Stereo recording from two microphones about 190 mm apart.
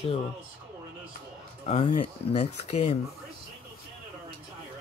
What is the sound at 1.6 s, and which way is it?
Speech, 35° left (ahead or behind).